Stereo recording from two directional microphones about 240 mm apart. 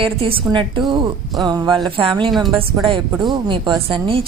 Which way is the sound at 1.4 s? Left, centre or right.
Centre.